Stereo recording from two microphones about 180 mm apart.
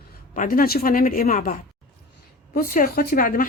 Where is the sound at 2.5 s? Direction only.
55° left (ahead or behind).